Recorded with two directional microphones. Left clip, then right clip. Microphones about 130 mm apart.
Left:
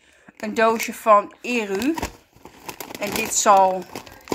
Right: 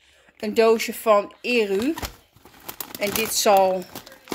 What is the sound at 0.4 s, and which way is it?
Speech, 25° right (ahead or behind).